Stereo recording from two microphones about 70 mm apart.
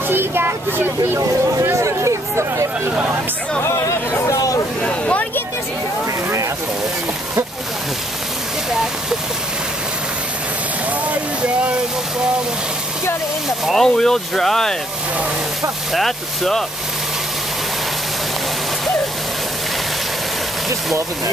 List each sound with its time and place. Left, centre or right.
0.1 s speech: right
1.6 s speech: right
3.6 s chatter: left
4.8 s a sound: centre
13.7 s speech: centre
15.9 s speech: centre